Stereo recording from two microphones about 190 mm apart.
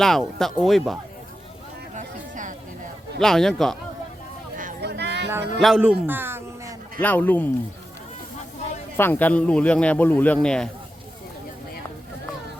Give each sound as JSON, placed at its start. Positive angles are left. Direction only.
{"t": 0.0, "sound": "speech", "side_deg": 0}
{"t": 2.0, "sound": "a sound", "side_deg": -40}
{"t": 3.2, "sound": "speech", "side_deg": 0}
{"t": 4.8, "sound": "a sound", "side_deg": -60}
{"t": 5.5, "sound": "a man's voice", "side_deg": -5}
{"t": 7.0, "sound": "speech", "side_deg": 10}
{"t": 9.0, "sound": "speech", "side_deg": 10}